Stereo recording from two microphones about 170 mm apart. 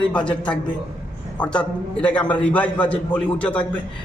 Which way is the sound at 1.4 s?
5° left (ahead or behind).